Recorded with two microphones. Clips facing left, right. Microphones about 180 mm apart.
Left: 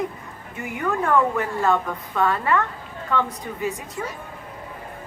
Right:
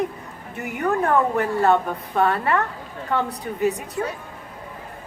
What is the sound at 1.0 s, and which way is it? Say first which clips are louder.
A woman's voice: left 1 dB; 35° right (ahead or behind).